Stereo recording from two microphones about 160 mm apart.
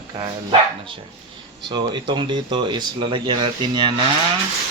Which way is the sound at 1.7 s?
30° right (ahead or behind).